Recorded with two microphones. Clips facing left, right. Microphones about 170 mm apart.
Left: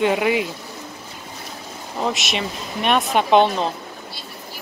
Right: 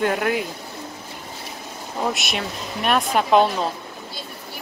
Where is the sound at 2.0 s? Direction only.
Centre (ahead or behind).